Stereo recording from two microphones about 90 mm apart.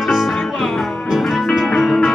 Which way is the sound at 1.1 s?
Centre (ahead or behind).